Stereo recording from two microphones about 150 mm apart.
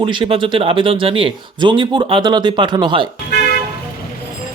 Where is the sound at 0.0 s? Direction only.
35° right (ahead or behind).